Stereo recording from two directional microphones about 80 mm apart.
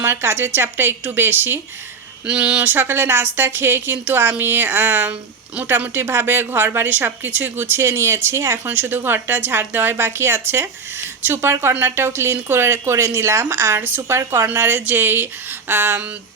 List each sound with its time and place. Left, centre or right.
0.0 s speech: right
2.2 s speech: centre
2.6 s a woman's voice: right